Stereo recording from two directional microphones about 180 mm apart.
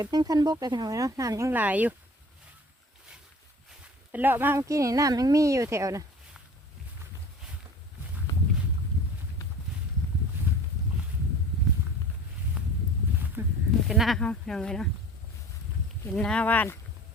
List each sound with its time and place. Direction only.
0.0 s speech: 20° right (ahead or behind)
4.1 s speech: 10° right (ahead or behind)
13.4 s a sound: 15° right (ahead or behind)
13.8 s speech: centre (ahead or behind)
16.0 s speech: 5° left (ahead or behind)